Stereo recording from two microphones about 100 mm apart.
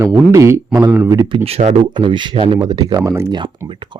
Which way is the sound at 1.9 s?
55° right (ahead or behind).